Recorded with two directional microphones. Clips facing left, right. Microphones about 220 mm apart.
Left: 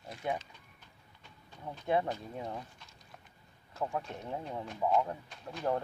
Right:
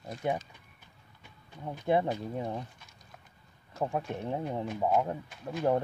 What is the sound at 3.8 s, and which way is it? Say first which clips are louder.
Speech: right 4 dB; 25° right (ahead or behind).